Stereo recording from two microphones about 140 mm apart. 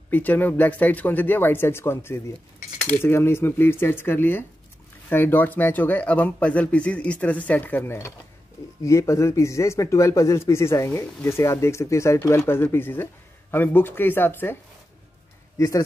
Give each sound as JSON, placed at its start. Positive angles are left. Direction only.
{"t": 0.1, "sound": "a man's voice", "side_deg": 10}